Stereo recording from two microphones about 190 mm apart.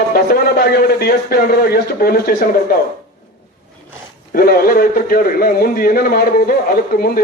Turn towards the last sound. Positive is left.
turn(degrees=50)  # may be behind; listen again after turning